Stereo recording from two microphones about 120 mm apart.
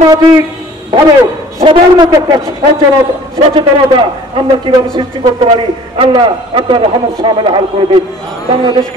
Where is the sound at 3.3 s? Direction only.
45° right (ahead or behind).